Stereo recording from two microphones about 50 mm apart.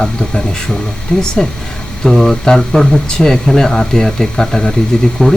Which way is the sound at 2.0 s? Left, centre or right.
Centre.